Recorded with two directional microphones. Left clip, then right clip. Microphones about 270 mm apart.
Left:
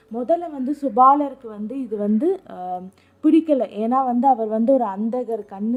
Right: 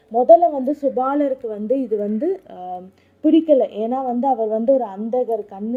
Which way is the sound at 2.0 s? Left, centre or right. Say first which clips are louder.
Even; centre.